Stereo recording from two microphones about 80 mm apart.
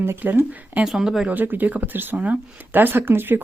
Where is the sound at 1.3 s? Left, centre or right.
Right.